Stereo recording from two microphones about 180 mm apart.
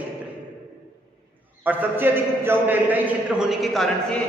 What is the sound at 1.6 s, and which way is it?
A man's voice, 10° right (ahead or behind).